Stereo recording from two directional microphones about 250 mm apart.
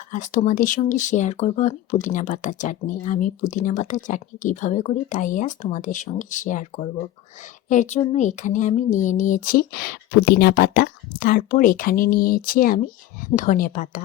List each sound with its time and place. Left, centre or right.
0.1 s speech: left